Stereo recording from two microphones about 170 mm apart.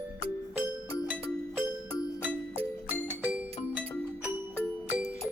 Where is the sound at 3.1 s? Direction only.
10° right (ahead or behind).